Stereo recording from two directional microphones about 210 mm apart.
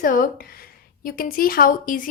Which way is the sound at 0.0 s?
40° left (ahead or behind).